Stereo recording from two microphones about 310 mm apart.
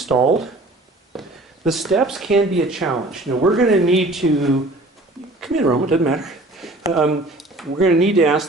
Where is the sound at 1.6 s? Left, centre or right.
Centre.